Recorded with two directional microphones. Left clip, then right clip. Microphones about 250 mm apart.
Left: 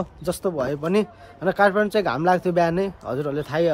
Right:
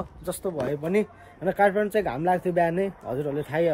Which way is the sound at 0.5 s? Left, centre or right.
Centre.